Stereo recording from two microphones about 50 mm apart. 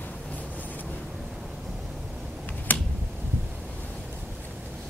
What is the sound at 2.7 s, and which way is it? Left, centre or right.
Finger snapping, left.